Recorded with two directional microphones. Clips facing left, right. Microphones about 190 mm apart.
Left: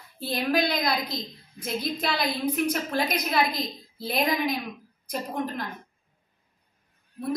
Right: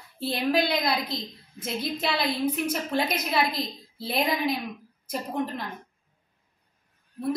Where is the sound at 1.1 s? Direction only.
30° right (ahead or behind).